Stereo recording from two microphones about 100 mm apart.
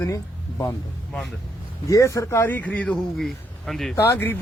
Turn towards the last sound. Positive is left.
turn(degrees=20)  # may be behind; listen again after turning